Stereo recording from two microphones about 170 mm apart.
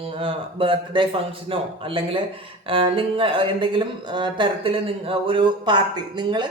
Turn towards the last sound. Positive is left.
turn(degrees=-25)  # may be behind; listen again after turning